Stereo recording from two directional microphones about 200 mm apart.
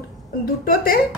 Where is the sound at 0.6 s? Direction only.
45° left (ahead or behind).